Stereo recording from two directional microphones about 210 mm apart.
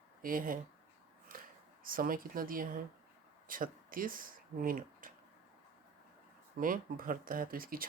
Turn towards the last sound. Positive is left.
turn(degrees=-45)  # may be behind; listen again after turning